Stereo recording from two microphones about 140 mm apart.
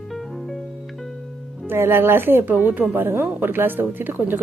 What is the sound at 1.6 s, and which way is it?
Speech, 15° right (ahead or behind).